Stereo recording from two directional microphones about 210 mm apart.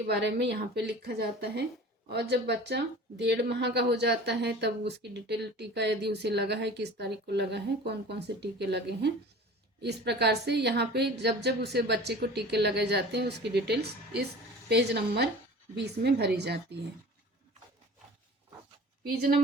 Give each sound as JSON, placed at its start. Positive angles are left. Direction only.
{"t": 0.1, "sound": "a woman's voice", "side_deg": -55}
{"t": 19.0, "sound": "a woman's voice", "side_deg": -45}